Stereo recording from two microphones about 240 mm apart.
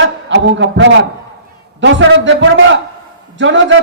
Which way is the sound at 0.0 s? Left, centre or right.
Right.